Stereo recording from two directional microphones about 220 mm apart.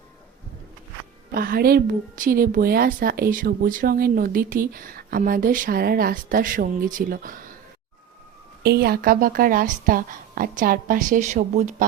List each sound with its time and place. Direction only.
1.3 s a woman's voice: 40° right (ahead or behind)
8.6 s a woman's voice: 45° right (ahead or behind)